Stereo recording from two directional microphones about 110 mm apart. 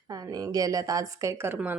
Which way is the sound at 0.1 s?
35° right (ahead or behind).